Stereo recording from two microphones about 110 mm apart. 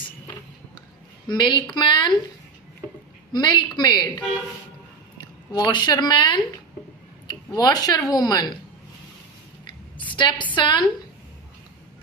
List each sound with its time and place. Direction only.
1.3 s a woman's voice: 45° left (ahead or behind)
3.3 s a woman's voice: 40° left (ahead or behind)
5.5 s a woman's voice: 45° left (ahead or behind)
10.0 s a woman's voice: 45° left (ahead or behind)